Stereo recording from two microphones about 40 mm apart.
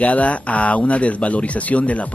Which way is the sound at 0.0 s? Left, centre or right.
Left.